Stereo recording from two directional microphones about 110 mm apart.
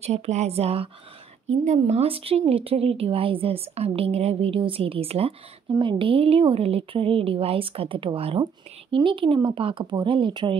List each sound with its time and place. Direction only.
0.0 s speech: 80° right
1.5 s speech: 85° right; by 5.3 s 65° right (ahead or behind)
5.8 s speech: 50° right (ahead or behind)